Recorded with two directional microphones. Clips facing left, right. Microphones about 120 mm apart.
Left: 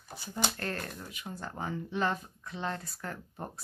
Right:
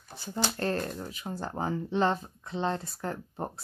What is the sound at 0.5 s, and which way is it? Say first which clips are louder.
Speech: right 7 dB; 30° right (ahead or behind).